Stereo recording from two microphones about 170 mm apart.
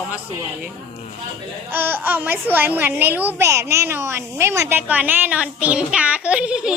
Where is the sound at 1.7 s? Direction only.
10° right (ahead or behind).